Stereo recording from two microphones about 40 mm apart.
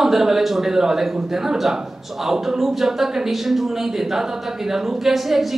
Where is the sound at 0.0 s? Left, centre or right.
Centre.